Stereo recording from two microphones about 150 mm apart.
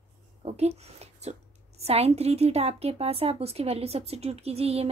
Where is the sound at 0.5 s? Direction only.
45° right (ahead or behind).